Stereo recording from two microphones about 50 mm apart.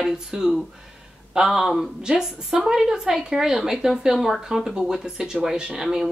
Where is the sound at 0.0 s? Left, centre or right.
Centre.